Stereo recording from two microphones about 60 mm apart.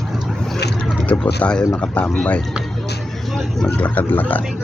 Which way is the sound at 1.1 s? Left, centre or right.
Left.